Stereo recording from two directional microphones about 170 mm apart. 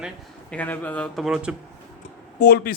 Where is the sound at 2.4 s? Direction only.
70° left (ahead or behind).